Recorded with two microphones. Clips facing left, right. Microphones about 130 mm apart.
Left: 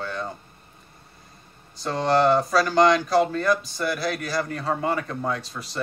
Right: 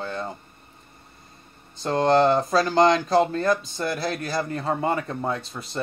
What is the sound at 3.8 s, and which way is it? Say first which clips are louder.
Speech: left 1 dB; 25° right (ahead or behind).